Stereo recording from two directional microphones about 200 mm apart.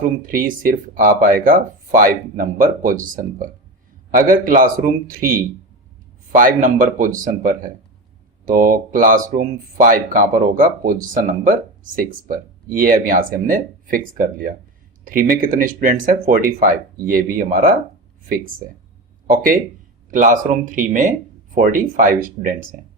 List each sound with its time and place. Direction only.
0.0 s speech: 45° right (ahead or behind)
19.3 s speech: 45° right (ahead or behind)